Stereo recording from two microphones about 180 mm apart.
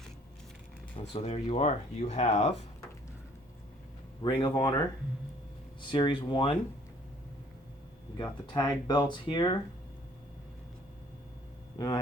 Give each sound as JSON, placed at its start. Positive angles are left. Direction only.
{"t": 0.9, "sound": "speech", "side_deg": 35}
{"t": 4.2, "sound": "speech", "side_deg": 25}
{"t": 5.9, "sound": "speech", "side_deg": 25}
{"t": 8.2, "sound": "speech", "side_deg": 25}